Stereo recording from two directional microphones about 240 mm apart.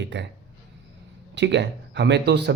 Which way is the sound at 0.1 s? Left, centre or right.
Right.